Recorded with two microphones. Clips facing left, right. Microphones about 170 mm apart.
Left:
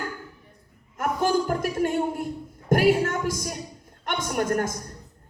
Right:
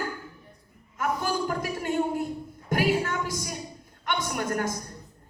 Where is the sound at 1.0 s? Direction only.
50° left (ahead or behind).